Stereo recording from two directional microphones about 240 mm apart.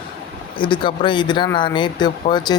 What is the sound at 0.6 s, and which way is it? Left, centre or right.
Speech, left.